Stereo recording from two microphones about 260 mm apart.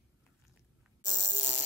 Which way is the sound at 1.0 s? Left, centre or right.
Centre.